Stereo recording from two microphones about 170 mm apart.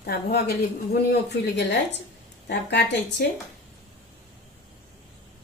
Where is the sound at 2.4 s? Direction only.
90° left.